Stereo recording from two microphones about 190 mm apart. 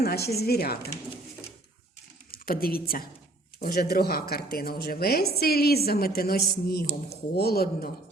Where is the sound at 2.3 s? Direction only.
50° left (ahead or behind).